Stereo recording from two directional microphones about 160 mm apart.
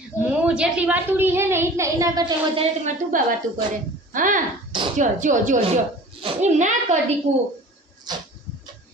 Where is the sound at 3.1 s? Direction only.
60° right (ahead or behind).